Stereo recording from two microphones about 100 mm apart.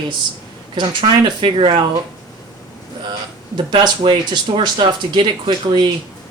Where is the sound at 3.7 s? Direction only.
55° right (ahead or behind).